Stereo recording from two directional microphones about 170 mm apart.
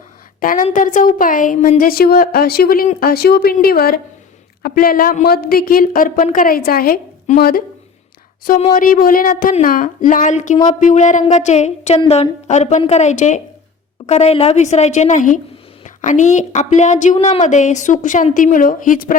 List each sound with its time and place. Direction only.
0.3 s a woman's voice: 55° left (ahead or behind)
8.7 s speech: 55° left (ahead or behind)